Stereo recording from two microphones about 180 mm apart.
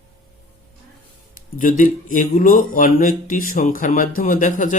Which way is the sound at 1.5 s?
50° left (ahead or behind).